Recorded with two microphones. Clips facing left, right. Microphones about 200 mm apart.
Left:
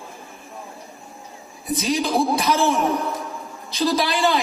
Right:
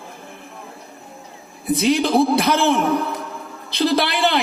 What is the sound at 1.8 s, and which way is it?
A man's voice, 60° right (ahead or behind).